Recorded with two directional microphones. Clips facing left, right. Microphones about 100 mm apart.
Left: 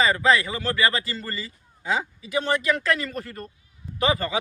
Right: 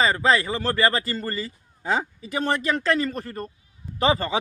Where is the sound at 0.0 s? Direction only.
30° right (ahead or behind).